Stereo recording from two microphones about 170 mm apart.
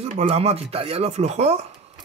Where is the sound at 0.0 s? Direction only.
40° right (ahead or behind).